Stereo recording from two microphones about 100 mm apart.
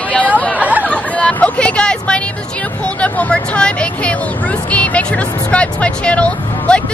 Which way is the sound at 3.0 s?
10° left (ahead or behind).